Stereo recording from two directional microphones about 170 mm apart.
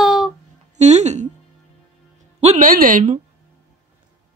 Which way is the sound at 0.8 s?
40° right (ahead or behind).